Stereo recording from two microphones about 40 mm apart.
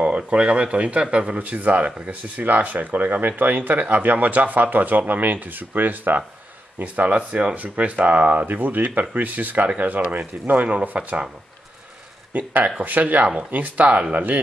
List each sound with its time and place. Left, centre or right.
0.0 s speech: right
6.8 s speech: right
12.3 s speech: right